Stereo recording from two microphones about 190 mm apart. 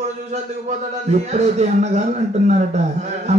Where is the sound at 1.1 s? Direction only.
35° right (ahead or behind).